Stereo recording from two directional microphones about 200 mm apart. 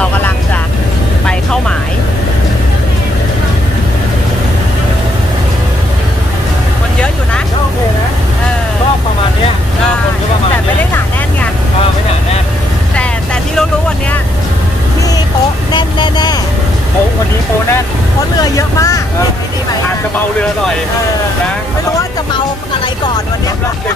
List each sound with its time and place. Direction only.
12.9 s vehicle: 5° left (ahead or behind)
15.7 s vehicle: 20° left (ahead or behind)
18.4 s vehicle: 15° left (ahead or behind)